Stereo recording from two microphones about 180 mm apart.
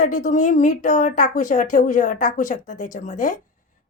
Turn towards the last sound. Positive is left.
turn(degrees=45)  # may be behind; listen again after turning